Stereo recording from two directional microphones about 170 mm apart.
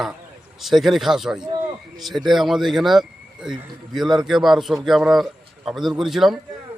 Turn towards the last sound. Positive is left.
turn(degrees=0)  # may be behind; listen again after turning